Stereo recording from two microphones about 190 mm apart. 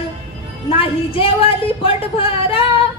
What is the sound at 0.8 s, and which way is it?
A woman's voice, 30° left (ahead or behind).